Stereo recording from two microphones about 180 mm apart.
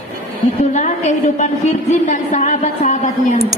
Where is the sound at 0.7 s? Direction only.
40° left (ahead or behind).